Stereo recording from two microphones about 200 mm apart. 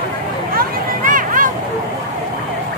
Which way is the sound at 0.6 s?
45° right (ahead or behind).